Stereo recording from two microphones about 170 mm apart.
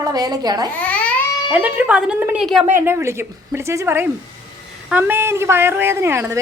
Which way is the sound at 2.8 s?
15° right (ahead or behind).